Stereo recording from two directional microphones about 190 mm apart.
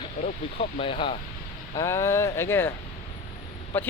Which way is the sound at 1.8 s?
15° left (ahead or behind).